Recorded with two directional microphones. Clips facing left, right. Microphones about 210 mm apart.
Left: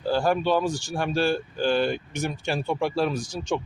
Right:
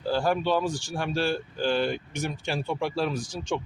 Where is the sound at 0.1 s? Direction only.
45° left (ahead or behind).